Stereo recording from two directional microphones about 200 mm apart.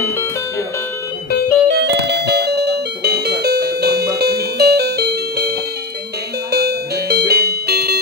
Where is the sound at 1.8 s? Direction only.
60° right (ahead or behind).